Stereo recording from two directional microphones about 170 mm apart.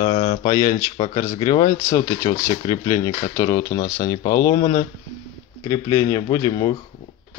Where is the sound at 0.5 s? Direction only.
25° left (ahead or behind).